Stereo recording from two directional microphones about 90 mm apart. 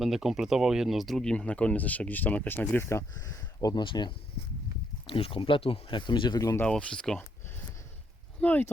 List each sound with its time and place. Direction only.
0.0 s speech: 5° right (ahead or behind); by 3.2 s 30° left (ahead or behind)
3.2 s speech: 40° left (ahead or behind)
3.8 s speech: 55° left (ahead or behind)
5.0 s speech: 90° left; by 6.4 s 55° left (ahead or behind)
6.7 s speech: 10° left (ahead or behind)
8.4 s speech: 20° left (ahead or behind)